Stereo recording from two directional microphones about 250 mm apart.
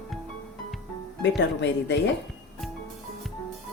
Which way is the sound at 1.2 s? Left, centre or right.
Left.